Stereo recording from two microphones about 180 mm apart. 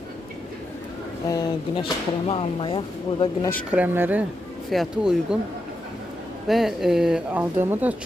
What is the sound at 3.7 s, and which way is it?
Speech, 10° right (ahead or behind).